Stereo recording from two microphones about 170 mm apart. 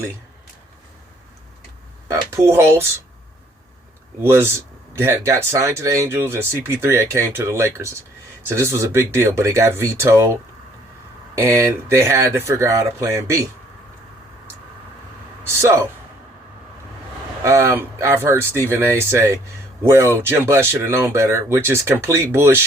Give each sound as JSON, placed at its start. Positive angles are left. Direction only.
{"t": 2.3, "sound": "speech", "side_deg": -15}
{"t": 4.2, "sound": "speech", "side_deg": -15}
{"t": 11.3, "sound": "speech", "side_deg": -15}
{"t": 15.4, "sound": "speech", "side_deg": -15}
{"t": 17.4, "sound": "speech", "side_deg": -15}